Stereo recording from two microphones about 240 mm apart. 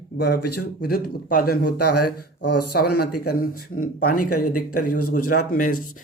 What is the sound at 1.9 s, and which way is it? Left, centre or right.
Speech, left.